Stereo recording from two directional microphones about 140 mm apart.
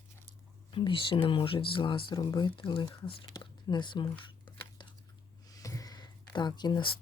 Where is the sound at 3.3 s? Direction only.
30° left (ahead or behind).